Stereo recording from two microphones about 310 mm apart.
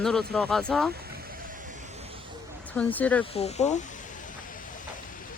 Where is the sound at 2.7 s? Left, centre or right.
Centre.